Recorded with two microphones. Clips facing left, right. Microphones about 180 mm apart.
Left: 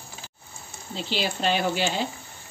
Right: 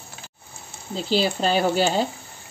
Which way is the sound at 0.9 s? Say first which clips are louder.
Right 6 dB; 40° right (ahead or behind).